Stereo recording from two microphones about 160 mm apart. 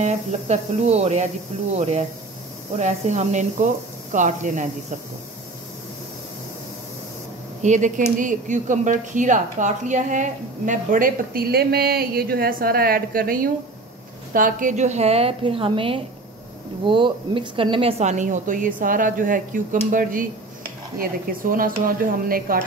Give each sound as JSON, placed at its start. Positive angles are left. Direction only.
{"t": 0.0, "sound": "speech", "side_deg": -45}
{"t": 7.6, "sound": "a woman's voice", "side_deg": -50}